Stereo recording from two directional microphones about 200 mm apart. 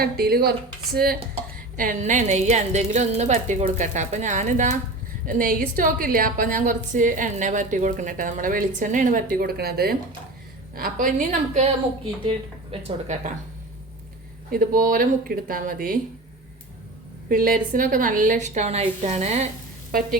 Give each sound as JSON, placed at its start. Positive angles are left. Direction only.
{"t": 0.0, "sound": "speech", "side_deg": -50}
{"t": 1.7, "sound": "a woman's voice", "side_deg": -40}
{"t": 12.7, "sound": "a woman's voice", "side_deg": -35}
{"t": 14.5, "sound": "speech", "side_deg": -45}
{"t": 17.2, "sound": "a woman's voice", "side_deg": -45}
{"t": 19.9, "sound": "speech", "side_deg": -45}